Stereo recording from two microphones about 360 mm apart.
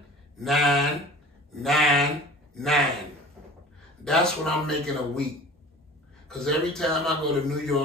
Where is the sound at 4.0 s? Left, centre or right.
Centre.